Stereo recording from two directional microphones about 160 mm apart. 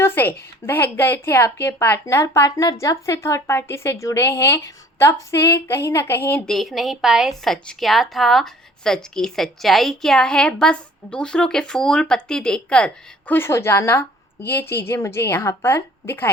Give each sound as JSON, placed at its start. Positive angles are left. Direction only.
{"t": 0.0, "sound": "a woman's voice", "side_deg": 15}